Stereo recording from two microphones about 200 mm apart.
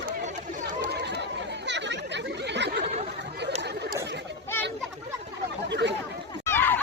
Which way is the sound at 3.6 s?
55° right (ahead or behind).